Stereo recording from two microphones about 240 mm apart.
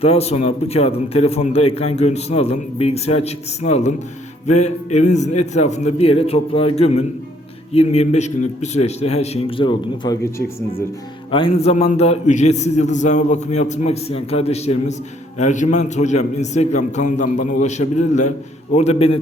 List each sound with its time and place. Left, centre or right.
0.0 s a man's voice: left